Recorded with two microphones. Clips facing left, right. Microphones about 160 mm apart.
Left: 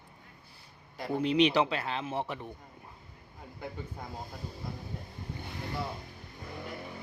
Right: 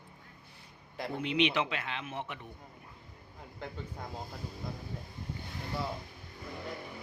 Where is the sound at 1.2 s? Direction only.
40° left (ahead or behind).